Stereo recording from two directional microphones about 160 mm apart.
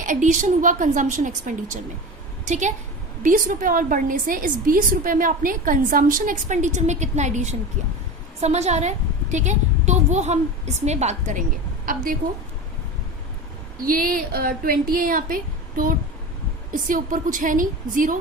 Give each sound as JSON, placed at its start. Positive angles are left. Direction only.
{"t": 0.0, "sound": "a woman's voice", "side_deg": -55}
{"t": 13.8, "sound": "a woman's voice", "side_deg": -60}